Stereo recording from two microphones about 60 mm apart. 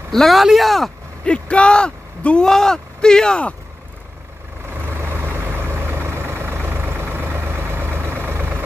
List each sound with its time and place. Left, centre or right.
0.1 s speech: centre
1.2 s speech: centre
4.8 s vehicle: right